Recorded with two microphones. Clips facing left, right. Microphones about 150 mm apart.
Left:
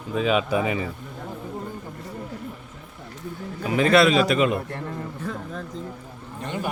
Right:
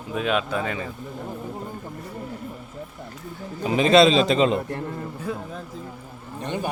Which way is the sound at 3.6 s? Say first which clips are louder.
Right 2 dB; 20° right (ahead or behind).